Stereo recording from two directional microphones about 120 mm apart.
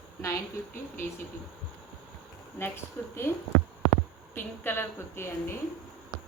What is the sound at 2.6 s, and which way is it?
Speech, 20° left (ahead or behind).